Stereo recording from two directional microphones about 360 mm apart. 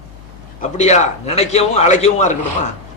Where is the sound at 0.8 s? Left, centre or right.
Centre.